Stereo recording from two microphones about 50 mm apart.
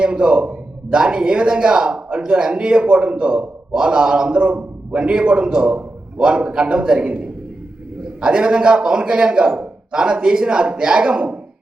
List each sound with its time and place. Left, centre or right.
0.0 s a man's voice: centre
8.2 s a man's voice: centre